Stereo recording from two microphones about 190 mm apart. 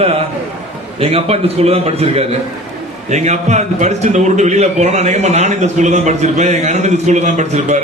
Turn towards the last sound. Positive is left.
turn(degrees=-35)  # may be behind; listen again after turning